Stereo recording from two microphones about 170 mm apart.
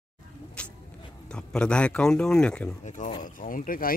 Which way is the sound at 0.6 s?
5° left (ahead or behind).